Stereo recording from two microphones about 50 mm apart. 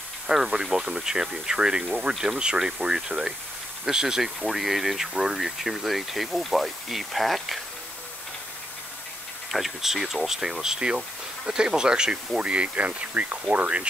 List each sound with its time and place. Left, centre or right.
0.5 s speech: centre
9.5 s speech: centre; by 13.8 s right